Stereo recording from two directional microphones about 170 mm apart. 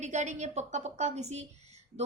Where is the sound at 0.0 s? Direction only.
45° right (ahead or behind).